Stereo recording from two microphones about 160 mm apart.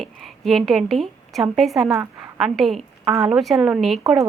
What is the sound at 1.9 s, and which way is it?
Speech, 15° right (ahead or behind).